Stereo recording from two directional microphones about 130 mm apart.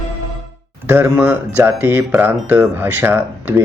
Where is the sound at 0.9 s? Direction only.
15° right (ahead or behind).